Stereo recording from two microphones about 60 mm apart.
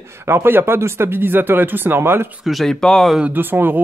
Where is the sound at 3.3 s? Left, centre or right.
Right.